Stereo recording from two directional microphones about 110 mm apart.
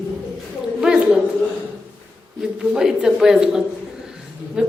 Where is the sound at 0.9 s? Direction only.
5° right (ahead or behind).